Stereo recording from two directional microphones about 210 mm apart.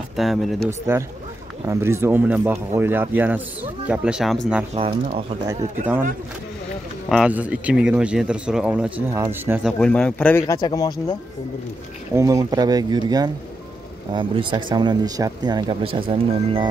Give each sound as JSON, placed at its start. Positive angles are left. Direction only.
{"t": 0.1, "sound": "speech", "side_deg": 0}
{"t": 0.7, "sound": "speech", "side_deg": -10}
{"t": 7.1, "sound": "speech", "side_deg": -5}
{"t": 12.1, "sound": "speech", "side_deg": -15}